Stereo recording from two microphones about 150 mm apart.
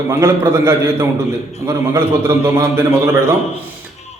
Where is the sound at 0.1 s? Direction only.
20° right (ahead or behind).